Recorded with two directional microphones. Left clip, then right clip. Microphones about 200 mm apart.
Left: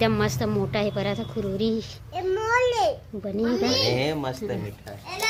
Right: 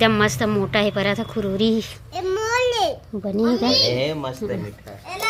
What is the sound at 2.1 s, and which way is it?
Babbling, 60° right (ahead or behind).